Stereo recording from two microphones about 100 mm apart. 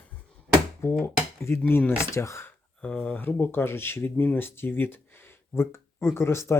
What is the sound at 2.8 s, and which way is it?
Speech, 15° left (ahead or behind).